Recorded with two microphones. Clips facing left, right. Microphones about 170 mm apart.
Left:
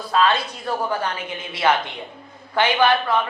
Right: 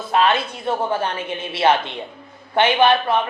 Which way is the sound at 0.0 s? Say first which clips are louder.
Right 1 dB; 20° right (ahead or behind).